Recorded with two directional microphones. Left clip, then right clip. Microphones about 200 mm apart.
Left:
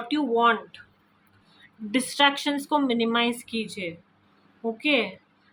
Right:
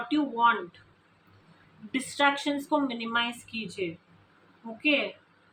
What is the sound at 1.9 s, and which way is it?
Speech, 60° left (ahead or behind).